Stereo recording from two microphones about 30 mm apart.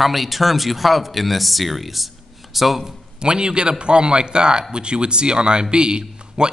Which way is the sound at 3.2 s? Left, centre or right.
Right.